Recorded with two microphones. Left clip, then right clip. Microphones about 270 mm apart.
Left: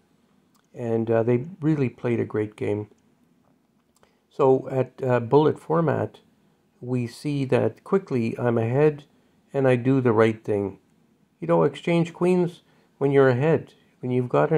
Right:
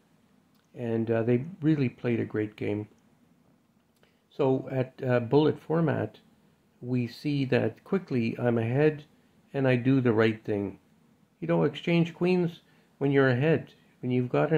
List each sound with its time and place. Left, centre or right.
0.7 s speech: centre
4.3 s speech: centre